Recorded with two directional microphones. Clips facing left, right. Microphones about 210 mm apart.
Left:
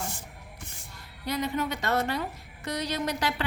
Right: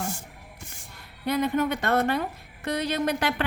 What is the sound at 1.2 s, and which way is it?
A woman's voice, 55° right (ahead or behind).